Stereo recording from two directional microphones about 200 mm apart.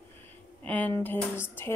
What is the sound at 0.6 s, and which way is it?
Speech, 10° left (ahead or behind).